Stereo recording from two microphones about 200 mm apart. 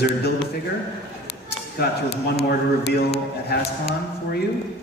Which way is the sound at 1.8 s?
55° left (ahead or behind).